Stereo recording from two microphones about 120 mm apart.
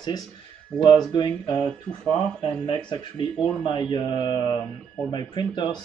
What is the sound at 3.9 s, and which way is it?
Speech, 35° left (ahead or behind).